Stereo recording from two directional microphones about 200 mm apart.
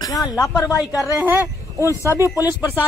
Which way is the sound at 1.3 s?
15° left (ahead or behind).